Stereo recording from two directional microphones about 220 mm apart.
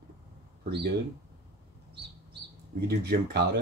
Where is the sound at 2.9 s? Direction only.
50° right (ahead or behind).